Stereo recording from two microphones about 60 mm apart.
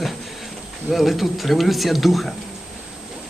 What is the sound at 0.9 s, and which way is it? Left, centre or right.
A man's voice, centre.